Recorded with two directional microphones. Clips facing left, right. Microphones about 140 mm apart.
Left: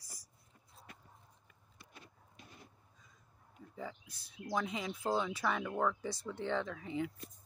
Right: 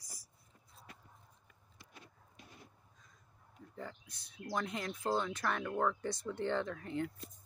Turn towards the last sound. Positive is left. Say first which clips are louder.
# even
turn(degrees=0)  # may be behind; listen again after turning